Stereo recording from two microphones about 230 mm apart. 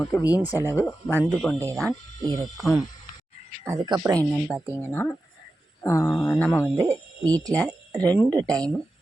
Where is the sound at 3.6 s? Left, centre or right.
Centre.